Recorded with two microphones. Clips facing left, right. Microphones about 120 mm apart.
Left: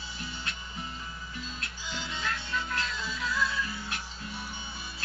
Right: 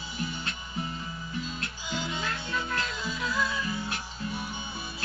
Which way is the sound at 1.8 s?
10° right (ahead or behind).